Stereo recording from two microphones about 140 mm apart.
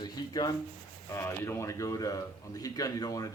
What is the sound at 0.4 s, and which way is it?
Speech, 25° left (ahead or behind).